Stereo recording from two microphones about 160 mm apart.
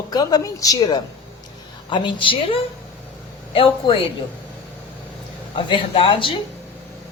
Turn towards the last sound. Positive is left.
turn(degrees=30)  # may be behind; listen again after turning